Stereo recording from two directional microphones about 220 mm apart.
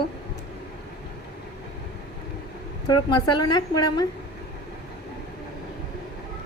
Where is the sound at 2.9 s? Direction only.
20° left (ahead or behind).